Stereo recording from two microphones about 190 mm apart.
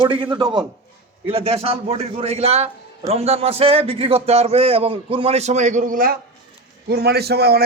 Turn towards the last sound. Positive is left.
turn(degrees=-55)  # may be behind; listen again after turning